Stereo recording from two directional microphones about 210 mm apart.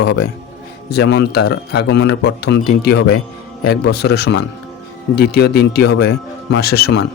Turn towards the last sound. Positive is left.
turn(degrees=50)  # may be behind; listen again after turning